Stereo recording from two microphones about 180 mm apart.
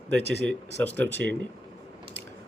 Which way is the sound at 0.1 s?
80° right.